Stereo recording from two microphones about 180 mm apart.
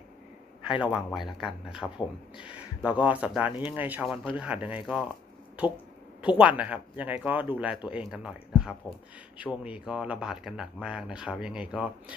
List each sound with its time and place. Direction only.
0.7 s a man's voice: 25° left (ahead or behind)
0.9 s speech: centre (ahead or behind)
6.3 s speech: 5° right (ahead or behind)